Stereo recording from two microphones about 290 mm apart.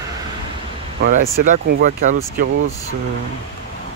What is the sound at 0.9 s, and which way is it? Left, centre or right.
Speech, right.